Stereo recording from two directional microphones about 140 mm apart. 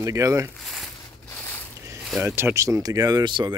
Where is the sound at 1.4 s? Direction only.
15° left (ahead or behind).